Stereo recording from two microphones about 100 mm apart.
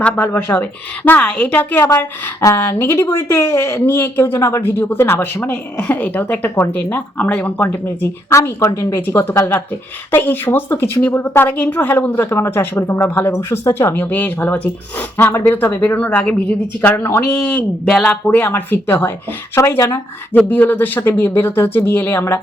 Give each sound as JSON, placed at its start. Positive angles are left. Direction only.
{"t": 0.0, "sound": "a woman's voice", "side_deg": 20}
{"t": 17.8, "sound": "speech", "side_deg": 0}
{"t": 18.1, "sound": "a woman's voice", "side_deg": 20}